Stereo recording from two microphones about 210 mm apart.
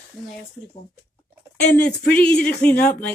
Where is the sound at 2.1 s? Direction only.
5° left (ahead or behind).